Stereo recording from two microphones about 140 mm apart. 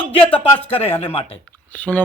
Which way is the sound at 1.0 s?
45° left (ahead or behind).